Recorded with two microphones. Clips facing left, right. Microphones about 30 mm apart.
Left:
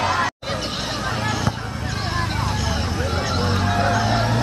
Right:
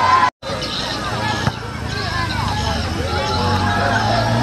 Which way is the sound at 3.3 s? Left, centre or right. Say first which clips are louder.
Right 3 dB; right.